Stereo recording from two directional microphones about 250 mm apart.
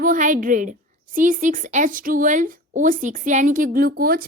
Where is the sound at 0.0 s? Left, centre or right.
Right.